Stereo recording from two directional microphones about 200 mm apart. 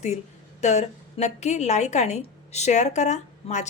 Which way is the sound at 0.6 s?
35° left (ahead or behind).